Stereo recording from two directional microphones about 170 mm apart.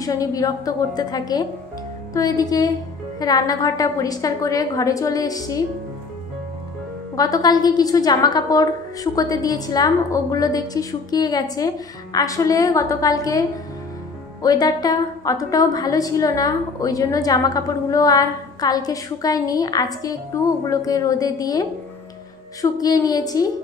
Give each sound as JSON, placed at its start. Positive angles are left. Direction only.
{"t": 0.0, "sound": "a woman's voice", "side_deg": 20}
{"t": 7.2, "sound": "a woman's voice", "side_deg": 20}